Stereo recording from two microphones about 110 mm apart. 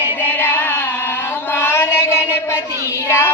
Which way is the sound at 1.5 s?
20° left (ahead or behind).